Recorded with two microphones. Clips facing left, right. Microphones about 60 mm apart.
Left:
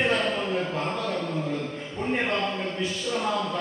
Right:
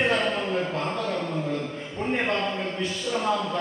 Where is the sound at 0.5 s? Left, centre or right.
Centre.